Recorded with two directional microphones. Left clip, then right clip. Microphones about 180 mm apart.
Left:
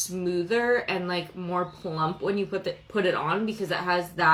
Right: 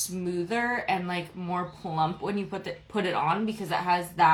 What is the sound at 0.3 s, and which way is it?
Speech, 15° right (ahead or behind).